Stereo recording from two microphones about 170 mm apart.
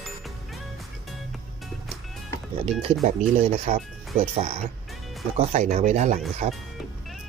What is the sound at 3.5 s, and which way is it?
Speech, 40° right (ahead or behind).